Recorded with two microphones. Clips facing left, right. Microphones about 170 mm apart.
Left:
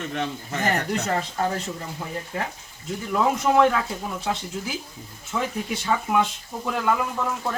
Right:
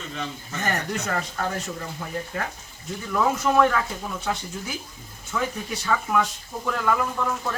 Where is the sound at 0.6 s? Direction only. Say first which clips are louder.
Left 3 dB; 25° left (ahead or behind).